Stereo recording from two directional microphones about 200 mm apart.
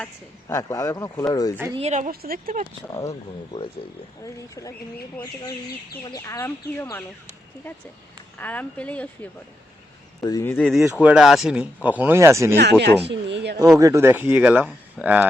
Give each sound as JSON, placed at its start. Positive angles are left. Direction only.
{"t": 0.4, "sound": "speech", "side_deg": 15}
{"t": 1.7, "sound": "a woman's voice", "side_deg": -35}
{"t": 3.1, "sound": "speech", "side_deg": 25}
{"t": 8.4, "sound": "speech", "side_deg": 10}
{"t": 12.5, "sound": "speech", "side_deg": -55}
{"t": 13.7, "sound": "speech", "side_deg": -15}